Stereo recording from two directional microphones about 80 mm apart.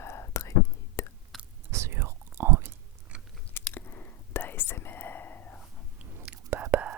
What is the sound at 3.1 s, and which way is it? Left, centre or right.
Biting, centre.